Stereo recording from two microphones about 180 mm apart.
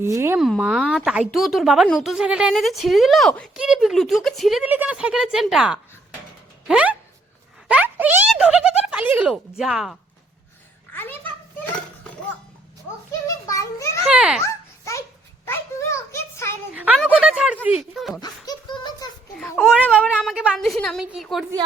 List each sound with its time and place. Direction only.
0.0 s speech: 15° right (ahead or behind)
0.3 s speech: centre (ahead or behind)
10.9 s a sound: 10° left (ahead or behind)
13.2 s a child's voice: 15° left (ahead or behind)
14.0 s speech: 5° right (ahead or behind)
14.4 s babbling: 15° left (ahead or behind)
15.4 s a sound: 15° left (ahead or behind)
16.7 s speech: 10° right (ahead or behind)
18.2 s laughter: 25° left (ahead or behind)
19.5 s a child's voice: 10° left (ahead or behind)
19.9 s speech: 5° right (ahead or behind)